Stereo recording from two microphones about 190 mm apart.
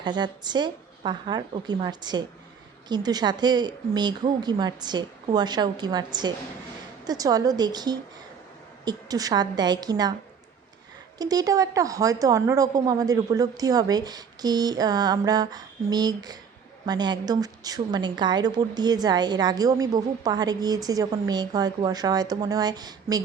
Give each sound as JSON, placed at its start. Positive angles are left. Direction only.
{"t": 0.0, "sound": "a woman's voice", "side_deg": -25}
{"t": 11.2, "sound": "a woman's voice", "side_deg": -20}